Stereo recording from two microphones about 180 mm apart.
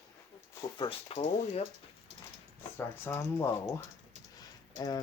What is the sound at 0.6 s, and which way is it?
Speech, 25° left (ahead or behind).